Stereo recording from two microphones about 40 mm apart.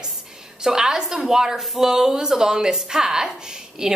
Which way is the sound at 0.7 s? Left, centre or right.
Centre.